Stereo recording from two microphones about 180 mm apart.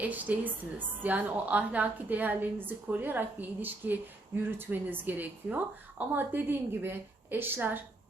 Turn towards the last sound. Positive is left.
turn(degrees=-10)  # may be behind; listen again after turning